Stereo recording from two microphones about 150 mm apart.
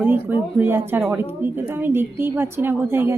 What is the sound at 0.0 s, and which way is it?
A woman's voice, 15° right (ahead or behind).